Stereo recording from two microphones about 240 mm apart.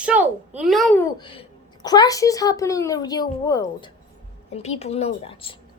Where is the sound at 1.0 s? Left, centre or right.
Centre.